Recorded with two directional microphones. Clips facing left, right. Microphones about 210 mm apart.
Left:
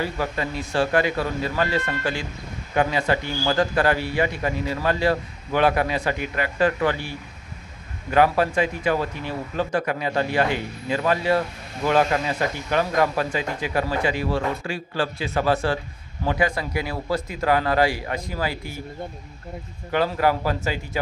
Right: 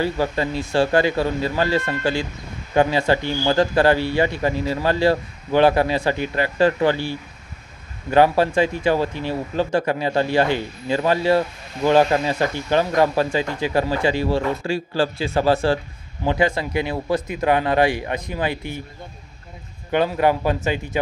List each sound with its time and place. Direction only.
0.0 s speech: 30° right (ahead or behind)
19.9 s speech: 20° right (ahead or behind)